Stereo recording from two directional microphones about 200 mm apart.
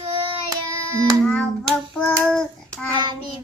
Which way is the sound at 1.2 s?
5° left (ahead or behind).